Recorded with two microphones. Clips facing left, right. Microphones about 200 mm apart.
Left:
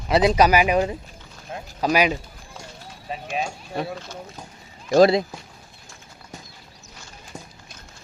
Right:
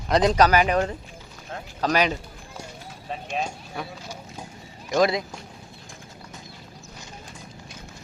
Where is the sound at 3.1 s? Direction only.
5° left (ahead or behind).